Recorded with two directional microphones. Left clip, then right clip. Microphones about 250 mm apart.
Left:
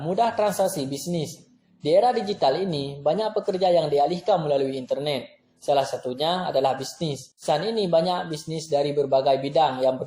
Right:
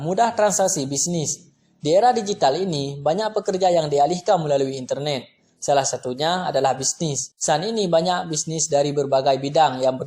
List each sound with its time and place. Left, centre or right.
0.0 s speech: right